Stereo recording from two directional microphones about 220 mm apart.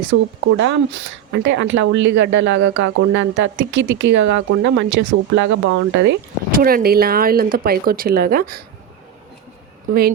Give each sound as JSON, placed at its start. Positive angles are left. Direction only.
{"t": 0.1, "sound": "speech", "side_deg": -55}